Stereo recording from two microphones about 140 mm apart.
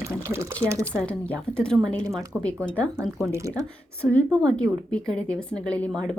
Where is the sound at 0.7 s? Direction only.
20° right (ahead or behind).